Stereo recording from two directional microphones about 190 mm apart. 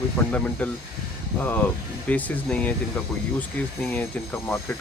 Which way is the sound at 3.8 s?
10° left (ahead or behind).